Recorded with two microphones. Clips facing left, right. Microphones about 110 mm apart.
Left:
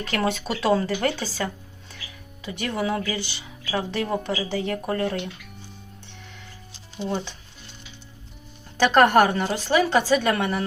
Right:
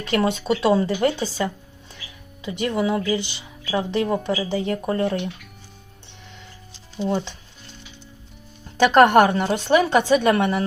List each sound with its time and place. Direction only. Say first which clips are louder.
0.1 s a woman's voice: right 5 dB; 20° right (ahead or behind)
7.0 s speech: right 5 dB; 5° right (ahead or behind)
8.9 s a woman's voice: right 3 dB; 20° right (ahead or behind)